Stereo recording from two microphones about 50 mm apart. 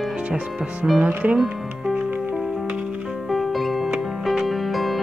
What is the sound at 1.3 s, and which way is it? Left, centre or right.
Music, centre.